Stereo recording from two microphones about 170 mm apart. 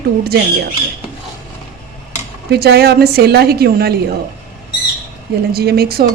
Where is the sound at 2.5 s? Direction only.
70° right (ahead or behind).